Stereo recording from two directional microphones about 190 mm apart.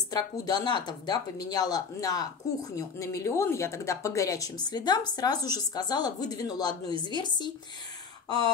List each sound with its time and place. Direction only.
0.1 s speech: 20° left (ahead or behind)